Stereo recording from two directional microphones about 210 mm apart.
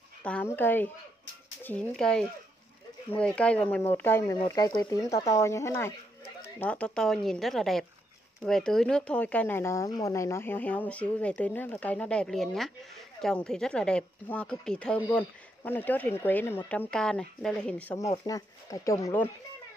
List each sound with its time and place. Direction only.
0.2 s speech: 5° left (ahead or behind)